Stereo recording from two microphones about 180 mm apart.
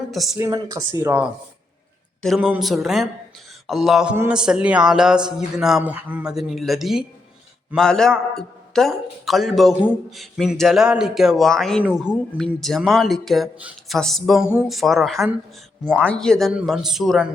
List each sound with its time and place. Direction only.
0.1 s speech: centre (ahead or behind)
0.3 s speech: 20° right (ahead or behind); by 17.2 s centre (ahead or behind)